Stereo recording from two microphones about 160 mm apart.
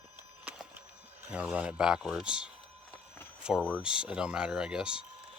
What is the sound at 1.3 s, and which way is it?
Speech, 10° right (ahead or behind).